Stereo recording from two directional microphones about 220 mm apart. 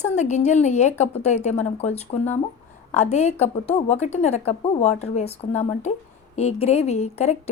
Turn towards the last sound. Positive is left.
turn(degrees=30)  # may be behind; listen again after turning